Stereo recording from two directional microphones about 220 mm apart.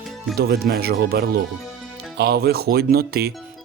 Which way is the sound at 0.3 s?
45° right (ahead or behind).